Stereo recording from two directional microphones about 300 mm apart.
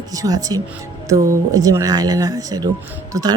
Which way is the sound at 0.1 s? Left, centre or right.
Centre.